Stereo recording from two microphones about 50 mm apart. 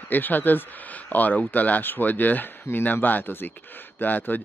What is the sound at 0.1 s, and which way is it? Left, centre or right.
Speech, left.